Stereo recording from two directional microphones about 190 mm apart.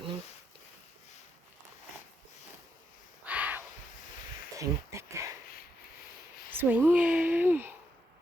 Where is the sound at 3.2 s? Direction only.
10° right (ahead or behind).